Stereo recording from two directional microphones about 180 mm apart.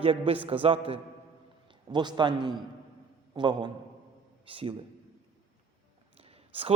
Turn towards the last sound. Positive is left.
turn(degrees=-30)  # may be behind; listen again after turning